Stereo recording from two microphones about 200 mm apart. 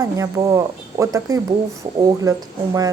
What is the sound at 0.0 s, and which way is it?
Speech, 15° right (ahead or behind).